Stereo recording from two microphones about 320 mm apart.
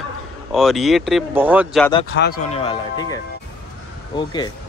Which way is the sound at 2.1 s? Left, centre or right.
Left.